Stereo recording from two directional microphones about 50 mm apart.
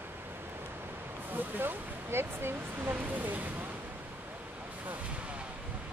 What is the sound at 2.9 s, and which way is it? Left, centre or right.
Speech, right.